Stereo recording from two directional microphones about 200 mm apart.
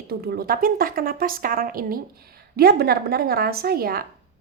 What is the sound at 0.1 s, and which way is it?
A woman's voice, 50° right (ahead or behind).